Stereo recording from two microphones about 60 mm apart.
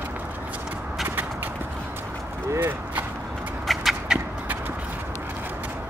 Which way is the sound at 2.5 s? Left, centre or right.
Right.